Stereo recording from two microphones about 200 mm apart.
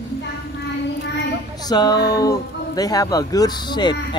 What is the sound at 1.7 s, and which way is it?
Speech, 20° left (ahead or behind).